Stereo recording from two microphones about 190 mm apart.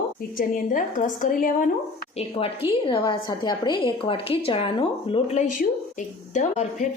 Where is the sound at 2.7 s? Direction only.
25° left (ahead or behind).